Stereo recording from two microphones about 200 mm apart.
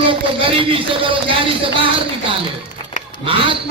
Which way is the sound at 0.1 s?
25° right (ahead or behind).